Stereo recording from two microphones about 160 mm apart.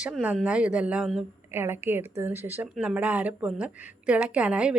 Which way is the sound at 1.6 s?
15° right (ahead or behind).